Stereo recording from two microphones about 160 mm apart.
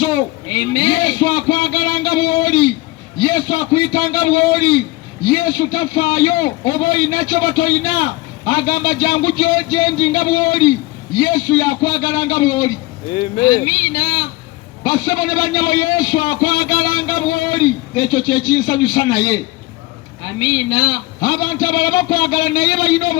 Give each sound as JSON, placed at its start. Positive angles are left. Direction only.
{"t": 0.0, "sound": "a sound", "side_deg": 25}
{"t": 3.2, "sound": "a man's voice", "side_deg": 25}
{"t": 20.4, "sound": "a man's voice", "side_deg": 25}